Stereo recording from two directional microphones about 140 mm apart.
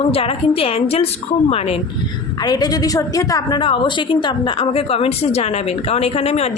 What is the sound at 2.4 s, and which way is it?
A woman's voice, 30° left (ahead or behind).